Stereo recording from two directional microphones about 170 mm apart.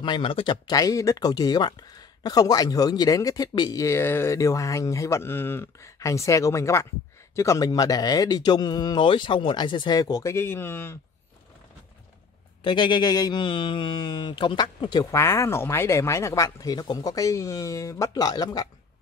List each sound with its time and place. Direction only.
0.0 s speech: 30° left (ahead or behind); by 11.0 s 15° left (ahead or behind)
12.6 s speech: 30° left (ahead or behind)